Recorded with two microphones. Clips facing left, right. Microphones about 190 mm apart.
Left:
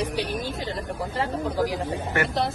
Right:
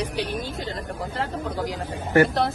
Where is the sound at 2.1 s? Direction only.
35° right (ahead or behind).